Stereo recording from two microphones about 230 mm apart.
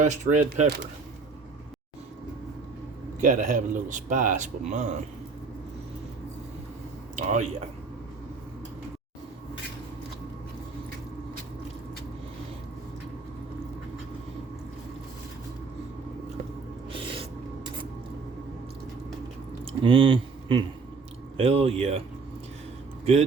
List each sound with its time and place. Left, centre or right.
0.0 s a man's voice: right
3.2 s a man's voice: right
7.2 s a man's voice: right
16.9 s music: right
19.8 s speech: right